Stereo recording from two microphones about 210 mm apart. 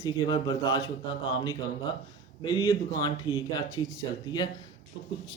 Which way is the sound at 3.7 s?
70° left (ahead or behind).